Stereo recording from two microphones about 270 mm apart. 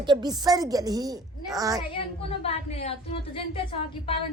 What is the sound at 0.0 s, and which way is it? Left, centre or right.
Child singing, centre.